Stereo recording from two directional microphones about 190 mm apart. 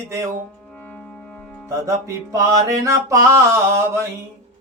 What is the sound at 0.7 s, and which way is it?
Music, 10° left (ahead or behind).